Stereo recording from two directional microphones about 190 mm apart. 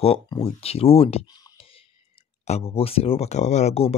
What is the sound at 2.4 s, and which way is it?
Speech, 35° left (ahead or behind).